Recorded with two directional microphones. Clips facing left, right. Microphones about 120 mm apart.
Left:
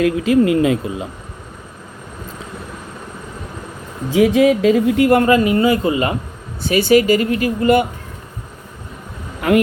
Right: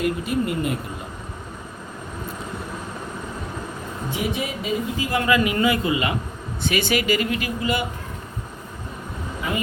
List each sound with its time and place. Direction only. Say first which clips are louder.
0.2 s speech: left 10 dB; 90° left
4.1 s speech: left 15 dB; 90° left; by 5.2 s 65° left (ahead or behind)
5.2 s speech: left 6 dB; 40° left (ahead or behind)
9.4 s a man's voice: left 13 dB; 75° left (ahead or behind)